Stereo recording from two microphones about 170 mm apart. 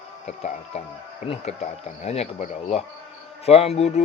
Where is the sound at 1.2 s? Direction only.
50° left (ahead or behind).